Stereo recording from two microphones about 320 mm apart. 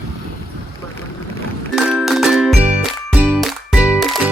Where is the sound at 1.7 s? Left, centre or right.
Centre.